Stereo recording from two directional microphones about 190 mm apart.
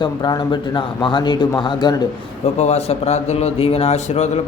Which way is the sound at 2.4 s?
35° left (ahead or behind).